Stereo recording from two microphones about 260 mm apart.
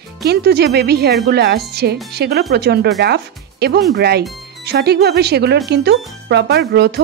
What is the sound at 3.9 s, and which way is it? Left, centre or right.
Speech, right.